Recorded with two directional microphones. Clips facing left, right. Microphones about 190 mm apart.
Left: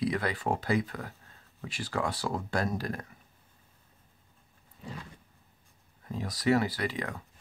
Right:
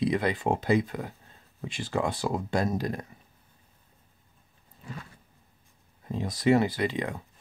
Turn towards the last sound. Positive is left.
turn(degrees=-20)  # may be behind; listen again after turning